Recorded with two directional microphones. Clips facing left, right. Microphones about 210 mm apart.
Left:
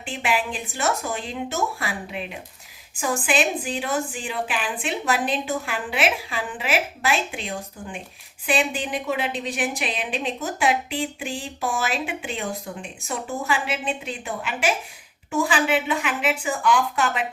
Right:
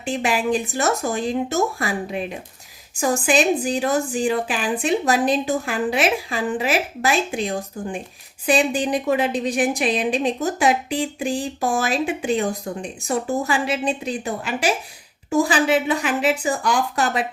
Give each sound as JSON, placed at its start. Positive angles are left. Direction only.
{"t": 0.0, "sound": "a woman's voice", "side_deg": -40}